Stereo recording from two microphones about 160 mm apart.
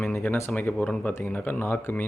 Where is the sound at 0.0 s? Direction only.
10° left (ahead or behind).